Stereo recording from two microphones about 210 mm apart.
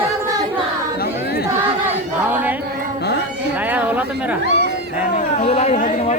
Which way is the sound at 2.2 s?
10° right (ahead or behind).